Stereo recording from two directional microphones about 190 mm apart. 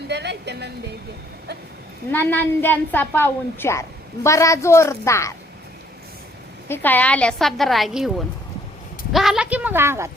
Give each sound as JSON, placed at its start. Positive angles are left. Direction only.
{"t": 0.1, "sound": "a woman's voice", "side_deg": -60}
{"t": 2.1, "sound": "a woman's voice", "side_deg": 10}
{"t": 6.7, "sound": "a woman's voice", "side_deg": 10}
{"t": 9.1, "sound": "speech", "side_deg": 0}